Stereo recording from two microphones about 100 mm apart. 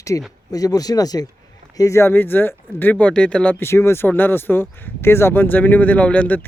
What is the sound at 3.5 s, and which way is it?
Speech, 25° left (ahead or behind).